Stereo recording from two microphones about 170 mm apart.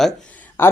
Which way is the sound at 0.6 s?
15° left (ahead or behind).